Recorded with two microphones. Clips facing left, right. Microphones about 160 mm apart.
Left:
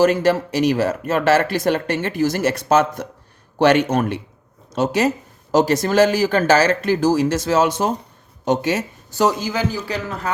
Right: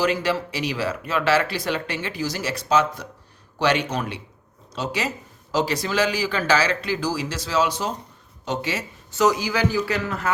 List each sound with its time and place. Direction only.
0.0 s speech: 45° left (ahead or behind)
9.5 s a man's voice: 20° left (ahead or behind)